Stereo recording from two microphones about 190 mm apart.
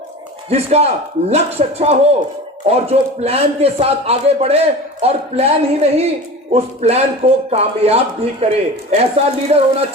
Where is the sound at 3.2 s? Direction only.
30° right (ahead or behind).